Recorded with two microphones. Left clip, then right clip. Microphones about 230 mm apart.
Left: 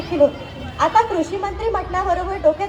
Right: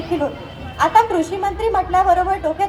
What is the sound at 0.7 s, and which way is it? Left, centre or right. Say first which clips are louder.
A woman's voice: right 2 dB; right.